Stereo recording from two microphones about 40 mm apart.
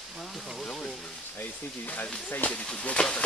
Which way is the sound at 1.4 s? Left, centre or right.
Left.